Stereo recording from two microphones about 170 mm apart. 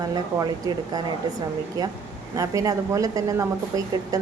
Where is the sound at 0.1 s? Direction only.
20° right (ahead or behind).